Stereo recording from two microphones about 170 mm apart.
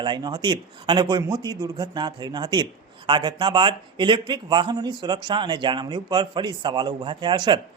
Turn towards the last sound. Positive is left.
turn(degrees=-25)  # may be behind; listen again after turning